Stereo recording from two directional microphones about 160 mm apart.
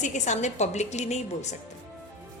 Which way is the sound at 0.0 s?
50° left (ahead or behind).